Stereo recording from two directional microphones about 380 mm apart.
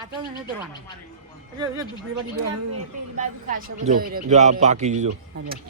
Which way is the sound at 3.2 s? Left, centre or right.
Centre.